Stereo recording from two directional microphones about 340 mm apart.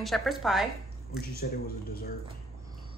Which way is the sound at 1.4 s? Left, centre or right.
Left.